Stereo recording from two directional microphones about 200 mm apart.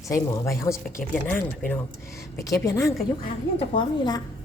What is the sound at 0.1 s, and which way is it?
A woman's voice, 15° left (ahead or behind).